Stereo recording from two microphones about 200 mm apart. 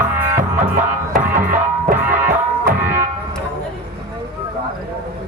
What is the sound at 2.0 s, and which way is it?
Music, 10° right (ahead or behind).